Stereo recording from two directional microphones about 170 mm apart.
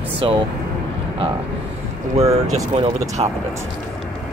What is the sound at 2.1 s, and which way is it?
Speech, 40° right (ahead or behind).